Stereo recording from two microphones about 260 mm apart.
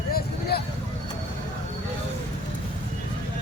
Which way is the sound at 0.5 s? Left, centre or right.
Left.